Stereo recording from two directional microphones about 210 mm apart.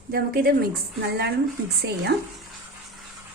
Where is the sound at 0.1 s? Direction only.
45° right (ahead or behind).